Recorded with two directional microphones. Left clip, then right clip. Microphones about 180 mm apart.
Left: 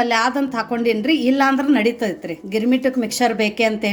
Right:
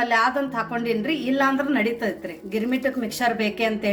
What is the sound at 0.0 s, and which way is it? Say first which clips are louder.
A woman's voice: left 3 dB; 45° left (ahead or behind).